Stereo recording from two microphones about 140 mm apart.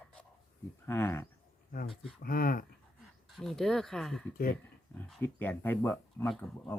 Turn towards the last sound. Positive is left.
turn(degrees=5)  # may be behind; listen again after turning